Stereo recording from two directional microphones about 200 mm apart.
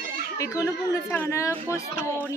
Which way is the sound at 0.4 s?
15° left (ahead or behind).